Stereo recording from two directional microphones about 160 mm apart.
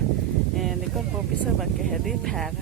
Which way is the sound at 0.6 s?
Centre (ahead or behind).